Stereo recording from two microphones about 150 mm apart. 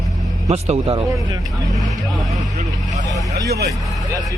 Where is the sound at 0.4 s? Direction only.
45° right (ahead or behind).